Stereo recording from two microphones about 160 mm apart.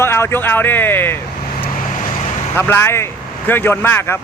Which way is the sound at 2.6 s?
15° left (ahead or behind).